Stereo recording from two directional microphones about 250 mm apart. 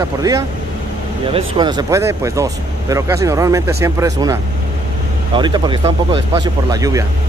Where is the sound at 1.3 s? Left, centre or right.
Centre.